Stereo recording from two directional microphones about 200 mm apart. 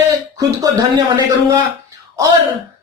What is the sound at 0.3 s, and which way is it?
Speech, 15° right (ahead or behind).